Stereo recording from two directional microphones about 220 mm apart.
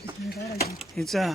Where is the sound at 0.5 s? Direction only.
45° left (ahead or behind).